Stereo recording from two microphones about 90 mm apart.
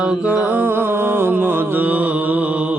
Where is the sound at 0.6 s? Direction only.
20° right (ahead or behind).